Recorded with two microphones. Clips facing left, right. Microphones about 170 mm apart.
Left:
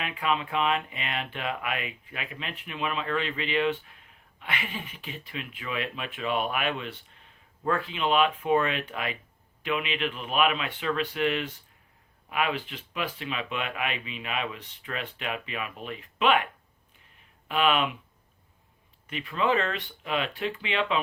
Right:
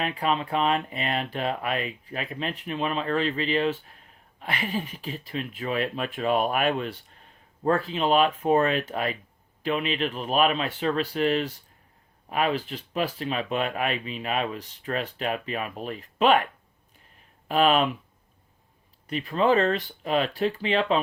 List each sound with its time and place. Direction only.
0.0 s speech: 35° right (ahead or behind)
17.5 s speech: 40° right (ahead or behind)
19.0 s speech: 35° right (ahead or behind)